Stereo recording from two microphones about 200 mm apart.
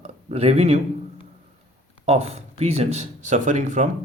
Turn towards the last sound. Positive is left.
turn(degrees=-35)  # may be behind; listen again after turning